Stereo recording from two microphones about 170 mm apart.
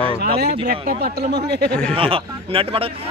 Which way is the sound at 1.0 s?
75° right (ahead or behind).